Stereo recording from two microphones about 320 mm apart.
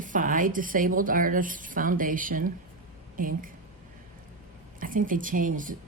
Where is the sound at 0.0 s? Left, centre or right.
Right.